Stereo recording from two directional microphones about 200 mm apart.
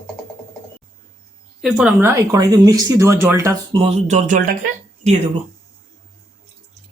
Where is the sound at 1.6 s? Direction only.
Centre (ahead or behind).